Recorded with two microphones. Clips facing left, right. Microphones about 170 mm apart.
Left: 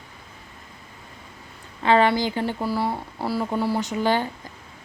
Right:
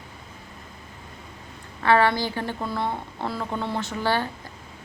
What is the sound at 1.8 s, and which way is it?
A woman's voice, 15° left (ahead or behind).